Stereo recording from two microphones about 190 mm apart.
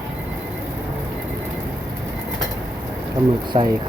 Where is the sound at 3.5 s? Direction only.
30° right (ahead or behind).